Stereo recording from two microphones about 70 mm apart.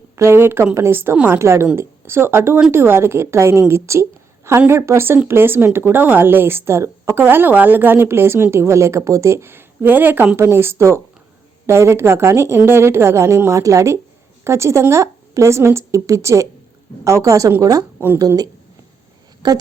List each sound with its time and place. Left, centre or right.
0.2 s a woman's voice: right
1.1 s a woman's voice: centre
1.4 s a woman's voice: right
7.3 s a woman's voice: right
10.3 s a woman's voice: right
19.4 s a woman's voice: right